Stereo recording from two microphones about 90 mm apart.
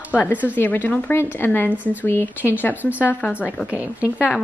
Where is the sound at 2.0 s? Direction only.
25° left (ahead or behind).